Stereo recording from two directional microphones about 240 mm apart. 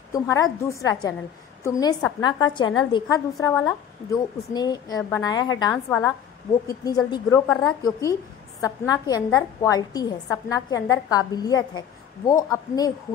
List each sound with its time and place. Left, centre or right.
0.1 s speech: centre